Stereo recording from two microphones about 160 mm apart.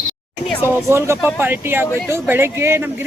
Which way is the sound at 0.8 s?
15° right (ahead or behind).